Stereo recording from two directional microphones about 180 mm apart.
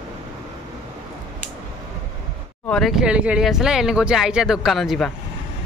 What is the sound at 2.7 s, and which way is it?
Speech, centre (ahead or behind).